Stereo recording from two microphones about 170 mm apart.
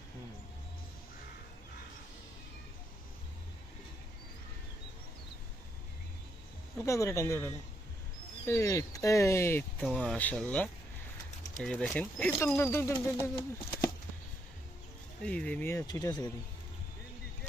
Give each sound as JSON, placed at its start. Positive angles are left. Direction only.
{"t": 6.7, "sound": "speech", "side_deg": 15}
{"t": 9.8, "sound": "speech", "side_deg": 5}
{"t": 15.2, "sound": "speech", "side_deg": 5}